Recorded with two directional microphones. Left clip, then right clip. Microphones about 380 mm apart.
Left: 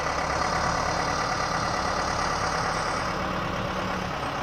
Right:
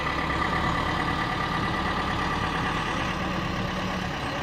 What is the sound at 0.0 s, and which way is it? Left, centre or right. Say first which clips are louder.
Vehicle: left 1 dB; left.